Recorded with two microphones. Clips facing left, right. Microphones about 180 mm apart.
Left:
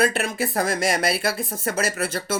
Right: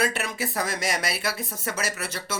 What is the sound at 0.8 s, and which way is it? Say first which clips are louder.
Speech: left 6 dB; 55° left (ahead or behind).